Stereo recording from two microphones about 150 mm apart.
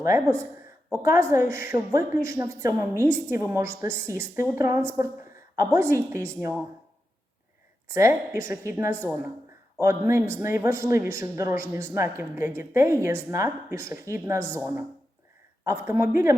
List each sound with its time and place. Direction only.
0.0 s speech: 20° right (ahead or behind)
7.9 s speech: 20° right (ahead or behind)